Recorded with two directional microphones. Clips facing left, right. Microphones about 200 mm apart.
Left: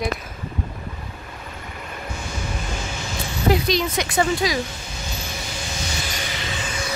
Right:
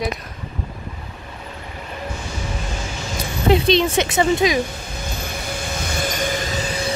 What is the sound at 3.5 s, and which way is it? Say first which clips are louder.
Speech: right 4 dB; 25° right (ahead or behind).